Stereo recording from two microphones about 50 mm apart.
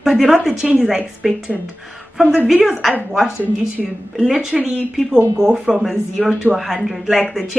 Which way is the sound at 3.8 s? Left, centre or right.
Centre.